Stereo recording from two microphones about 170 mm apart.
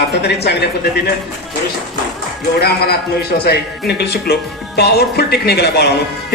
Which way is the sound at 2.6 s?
70° left (ahead or behind).